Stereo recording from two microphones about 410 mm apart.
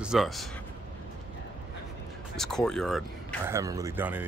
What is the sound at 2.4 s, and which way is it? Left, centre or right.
Speech, centre.